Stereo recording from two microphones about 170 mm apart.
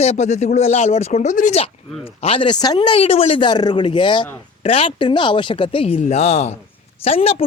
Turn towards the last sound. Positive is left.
turn(degrees=35)  # may be behind; listen again after turning